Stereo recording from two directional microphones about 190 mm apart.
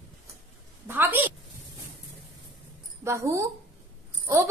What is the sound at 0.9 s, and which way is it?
Speech, 10° right (ahead or behind).